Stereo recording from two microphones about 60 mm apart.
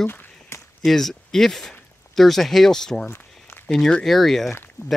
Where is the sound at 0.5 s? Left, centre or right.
Left.